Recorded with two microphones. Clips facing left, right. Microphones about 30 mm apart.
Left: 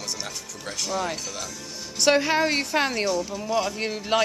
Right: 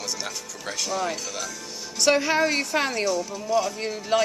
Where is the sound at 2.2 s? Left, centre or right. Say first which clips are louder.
Even; centre.